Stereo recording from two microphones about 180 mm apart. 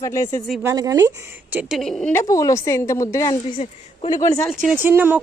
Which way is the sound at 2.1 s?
20° left (ahead or behind).